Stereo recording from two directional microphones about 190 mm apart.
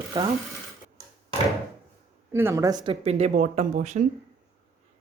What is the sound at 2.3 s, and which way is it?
Speech, 15° right (ahead or behind).